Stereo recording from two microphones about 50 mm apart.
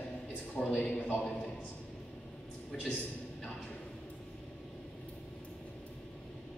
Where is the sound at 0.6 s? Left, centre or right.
Centre.